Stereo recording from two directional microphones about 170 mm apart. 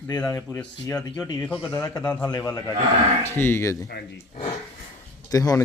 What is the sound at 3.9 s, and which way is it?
Speech, 70° left (ahead or behind).